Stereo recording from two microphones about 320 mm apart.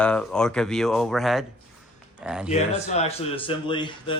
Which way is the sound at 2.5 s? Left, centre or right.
Left.